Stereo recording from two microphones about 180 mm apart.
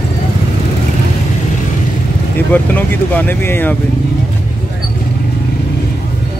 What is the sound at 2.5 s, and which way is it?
Speech, 10° left (ahead or behind).